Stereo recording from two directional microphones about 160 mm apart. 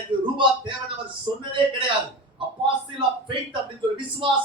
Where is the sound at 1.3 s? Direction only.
25° right (ahead or behind).